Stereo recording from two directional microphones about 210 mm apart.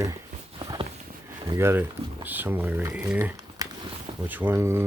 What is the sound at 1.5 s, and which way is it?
Speech, 10° right (ahead or behind).